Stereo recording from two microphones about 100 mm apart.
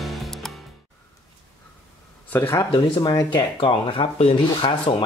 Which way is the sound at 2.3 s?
20° left (ahead or behind).